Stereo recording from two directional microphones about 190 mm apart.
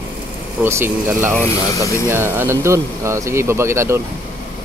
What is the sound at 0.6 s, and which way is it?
Speech, 10° right (ahead or behind).